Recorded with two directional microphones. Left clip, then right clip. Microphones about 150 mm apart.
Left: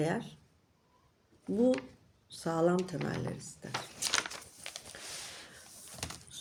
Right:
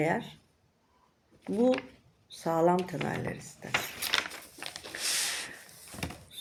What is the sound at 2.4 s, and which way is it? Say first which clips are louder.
Speech: right 4 dB; 15° left (ahead or behind).